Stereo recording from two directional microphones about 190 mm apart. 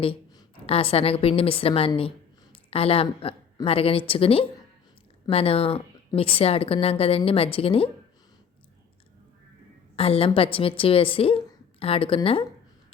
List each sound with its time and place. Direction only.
0.0 s a woman's voice: 30° left (ahead or behind)
9.9 s a woman's voice: 30° left (ahead or behind)